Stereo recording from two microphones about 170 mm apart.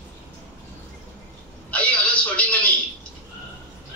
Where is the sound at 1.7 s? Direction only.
10° left (ahead or behind).